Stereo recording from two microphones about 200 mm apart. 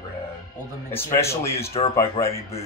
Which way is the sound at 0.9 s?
15° left (ahead or behind).